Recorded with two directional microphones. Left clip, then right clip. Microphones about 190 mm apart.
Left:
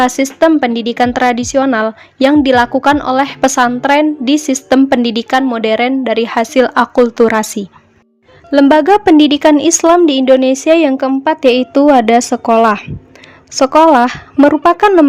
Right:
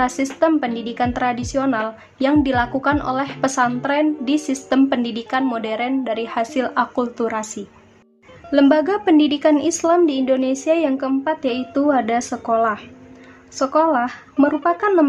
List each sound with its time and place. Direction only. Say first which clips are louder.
0.0 s a woman's voice: left 8 dB; 40° left (ahead or behind)